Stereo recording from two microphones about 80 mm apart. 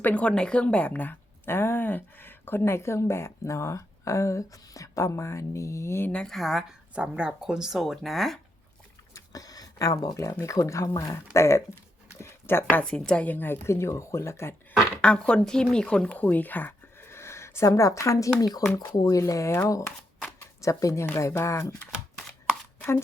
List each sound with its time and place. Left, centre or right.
0.0 s a woman's voice: centre; by 6.1 s left
6.1 s speech: centre
6.3 s speech: centre
9.1 s a sound: left
10.4 s a woman's voice: left
12.2 s a sound: left
12.8 s a woman's voice: centre; by 14.5 s left
14.7 s speech: centre; by 18.3 s left
18.3 s speech: left
19.2 s a woman's voice: left